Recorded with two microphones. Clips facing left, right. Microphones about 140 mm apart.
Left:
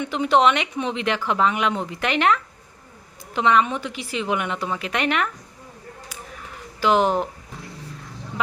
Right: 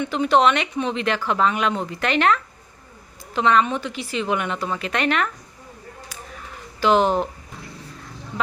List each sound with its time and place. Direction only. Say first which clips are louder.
0.0 s a woman's voice: right 1 dB; 15° left (ahead or behind)
6.7 s a woman's voice: right 1 dB; 10° left (ahead or behind)